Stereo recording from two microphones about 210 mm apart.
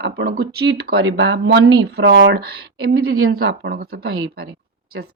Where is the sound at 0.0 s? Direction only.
45° right (ahead or behind).